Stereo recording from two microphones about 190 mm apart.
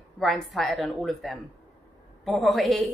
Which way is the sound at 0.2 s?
Centre (ahead or behind).